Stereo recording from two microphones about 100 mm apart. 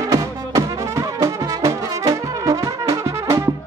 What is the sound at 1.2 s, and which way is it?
Brass instrument, 35° right (ahead or behind).